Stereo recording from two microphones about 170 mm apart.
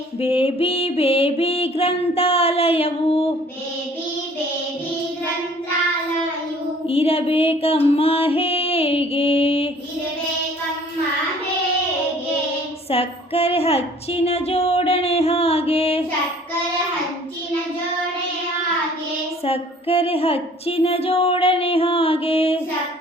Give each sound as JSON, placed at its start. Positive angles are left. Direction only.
{"t": 0.2, "sound": "music", "side_deg": 35}
{"t": 6.8, "sound": "music", "side_deg": 35}
{"t": 12.9, "sound": "a sound", "side_deg": 35}
{"t": 19.5, "sound": "music", "side_deg": 35}